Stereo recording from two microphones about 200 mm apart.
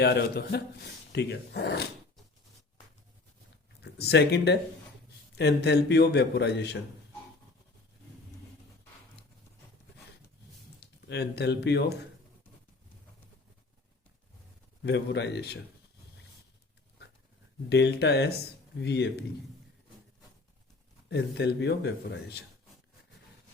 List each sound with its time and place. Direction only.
0.0 s speech: 55° left (ahead or behind)
3.8 s a man's voice: 55° left (ahead or behind)
10.8 s speech: 55° left (ahead or behind)
14.8 s a man's voice: 60° left (ahead or behind)
17.7 s a man's voice: 55° left (ahead or behind)
21.1 s a man's voice: 55° left (ahead or behind)